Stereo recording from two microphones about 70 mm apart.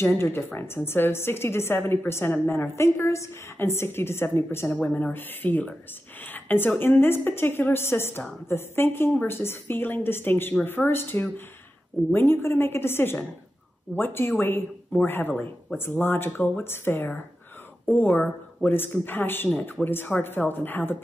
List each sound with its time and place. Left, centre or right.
0.0 s a woman's voice: left
4.6 s a woman's voice: centre